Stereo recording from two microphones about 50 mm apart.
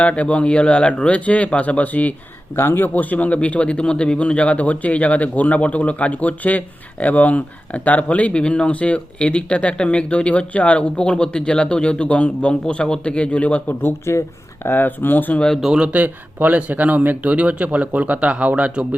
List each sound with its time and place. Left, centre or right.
0.0 s speech: left
2.6 s speech: left
14.0 s speech: left
14.7 s speech: left
15.6 s speech: centre
15.9 s speech: right